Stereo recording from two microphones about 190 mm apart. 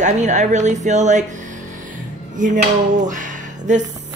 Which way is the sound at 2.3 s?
40° right (ahead or behind).